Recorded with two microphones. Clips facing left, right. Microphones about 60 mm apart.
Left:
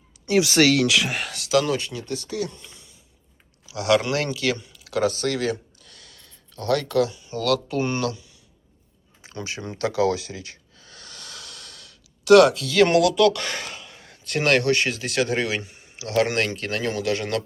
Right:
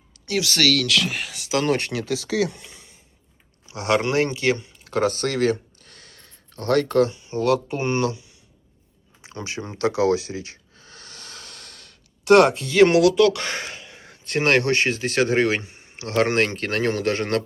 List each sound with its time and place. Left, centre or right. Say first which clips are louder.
0.3 s speech: left 4 dB; left
1.7 s speech: right 4 dB; right
3.7 s speech: left 1 dB; right
9.2 s speech: right 1 dB; right
9.8 s a sound: right 2 dB; right
12.7 s speech: right 5 dB; right